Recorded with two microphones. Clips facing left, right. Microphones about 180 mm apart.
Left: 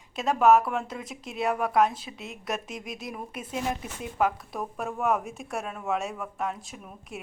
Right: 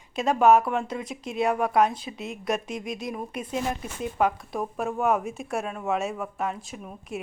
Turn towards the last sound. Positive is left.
turn(degrees=0)  # may be behind; listen again after turning